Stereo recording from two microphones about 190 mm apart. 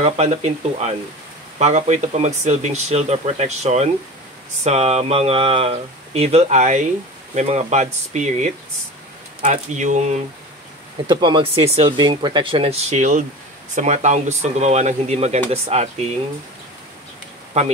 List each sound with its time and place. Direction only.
0.0 s speech: 35° right (ahead or behind)
11.1 s speech: 25° right (ahead or behind)